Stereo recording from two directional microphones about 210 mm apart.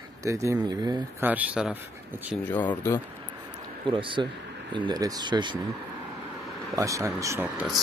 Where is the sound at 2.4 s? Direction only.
10° left (ahead or behind).